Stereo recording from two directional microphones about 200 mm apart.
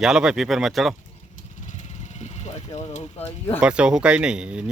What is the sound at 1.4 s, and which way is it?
Vehicle, 40° left (ahead or behind).